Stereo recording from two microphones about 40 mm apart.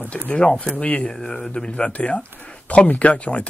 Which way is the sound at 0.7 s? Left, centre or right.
Left.